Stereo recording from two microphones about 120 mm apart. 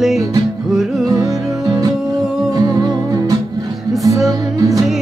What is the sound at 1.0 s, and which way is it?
Music, 30° right (ahead or behind).